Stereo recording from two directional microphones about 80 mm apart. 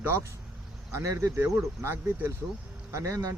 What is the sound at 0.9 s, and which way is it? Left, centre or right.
Speech, right.